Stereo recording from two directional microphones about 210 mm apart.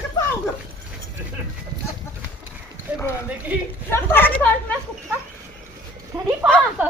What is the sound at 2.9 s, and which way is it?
Horse, 10° right (ahead or behind).